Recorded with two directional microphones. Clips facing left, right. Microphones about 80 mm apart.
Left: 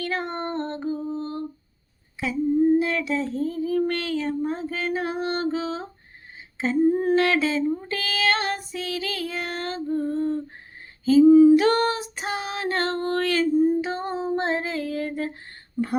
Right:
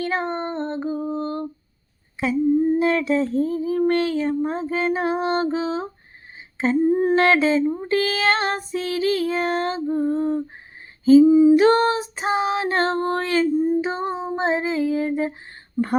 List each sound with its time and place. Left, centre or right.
0.0 s female singing: right
0.9 s female singing: right
2.7 s a sound: right
11.3 s singing: centre
11.5 s a sound: right
13.7 s female singing: right